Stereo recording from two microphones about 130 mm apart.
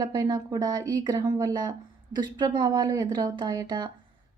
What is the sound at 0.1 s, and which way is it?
A woman's voice, 30° right (ahead or behind).